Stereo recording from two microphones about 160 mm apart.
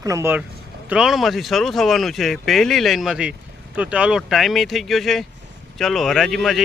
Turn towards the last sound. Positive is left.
turn(degrees=0)  # may be behind; listen again after turning